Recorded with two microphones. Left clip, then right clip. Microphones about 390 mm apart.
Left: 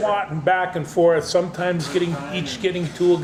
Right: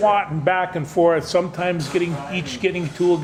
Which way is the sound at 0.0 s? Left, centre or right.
Right.